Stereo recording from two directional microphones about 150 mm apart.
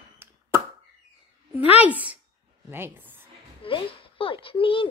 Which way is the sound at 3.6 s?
35° left (ahead or behind).